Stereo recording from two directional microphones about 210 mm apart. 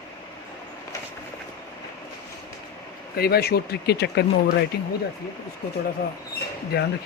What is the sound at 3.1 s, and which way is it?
Speech, 50° left (ahead or behind).